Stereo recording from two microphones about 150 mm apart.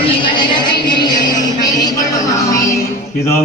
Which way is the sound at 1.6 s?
25° left (ahead or behind).